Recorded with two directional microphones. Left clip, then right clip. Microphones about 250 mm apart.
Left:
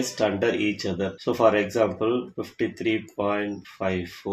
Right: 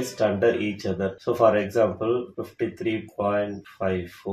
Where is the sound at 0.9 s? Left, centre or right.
Left.